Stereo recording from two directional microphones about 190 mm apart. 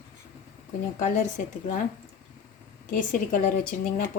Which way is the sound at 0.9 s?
40° left (ahead or behind).